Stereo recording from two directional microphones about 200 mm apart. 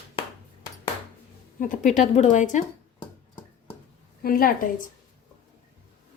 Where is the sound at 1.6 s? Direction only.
40° left (ahead or behind).